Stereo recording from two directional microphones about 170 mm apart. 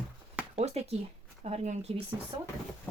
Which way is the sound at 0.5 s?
40° right (ahead or behind).